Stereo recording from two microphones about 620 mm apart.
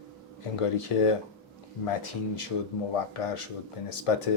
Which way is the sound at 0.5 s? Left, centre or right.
Left.